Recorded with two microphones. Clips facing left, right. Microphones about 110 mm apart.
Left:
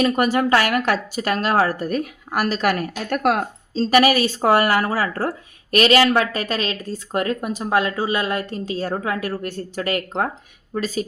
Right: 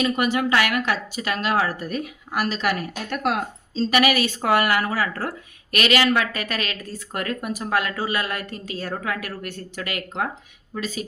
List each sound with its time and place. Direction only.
0.0 s speech: 40° left (ahead or behind)